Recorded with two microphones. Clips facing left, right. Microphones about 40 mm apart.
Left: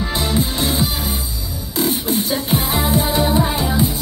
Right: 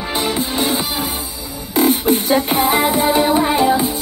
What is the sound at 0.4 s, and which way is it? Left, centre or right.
Music, centre.